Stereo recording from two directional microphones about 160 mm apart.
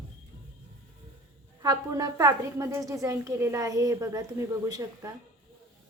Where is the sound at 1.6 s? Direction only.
20° right (ahead or behind).